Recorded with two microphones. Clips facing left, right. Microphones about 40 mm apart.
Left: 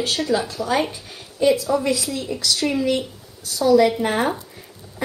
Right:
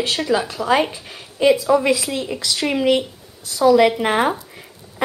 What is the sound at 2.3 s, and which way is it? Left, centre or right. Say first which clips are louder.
Speech: left 1 dB; right.